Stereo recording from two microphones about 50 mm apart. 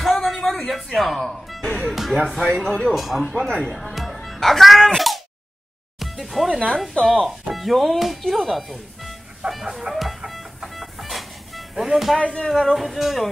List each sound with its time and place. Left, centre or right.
0.0 s a sound: centre
0.9 s speech: centre
2.9 s speech: centre
3.4 s speech: centre
3.7 s speech: centre
5.9 s music: centre
6.8 s speech: centre
9.5 s music: centre
12.2 s speech: left
12.4 s speech: centre